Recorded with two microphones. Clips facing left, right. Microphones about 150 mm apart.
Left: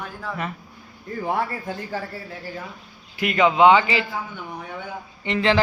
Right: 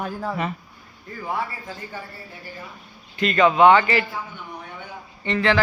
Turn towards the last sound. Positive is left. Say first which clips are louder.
# even
turn(degrees=20)  # may be behind; listen again after turning